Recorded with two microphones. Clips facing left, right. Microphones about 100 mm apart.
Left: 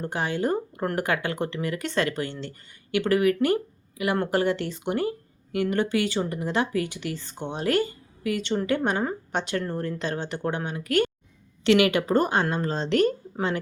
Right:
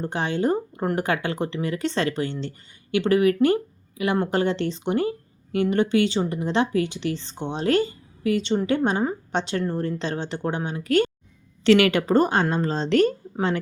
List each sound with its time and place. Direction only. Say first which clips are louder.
0.0 s a woman's voice: right 3 dB; 25° right (ahead or behind)